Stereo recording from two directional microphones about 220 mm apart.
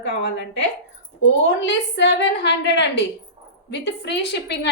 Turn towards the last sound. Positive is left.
turn(degrees=50)  # may be behind; listen again after turning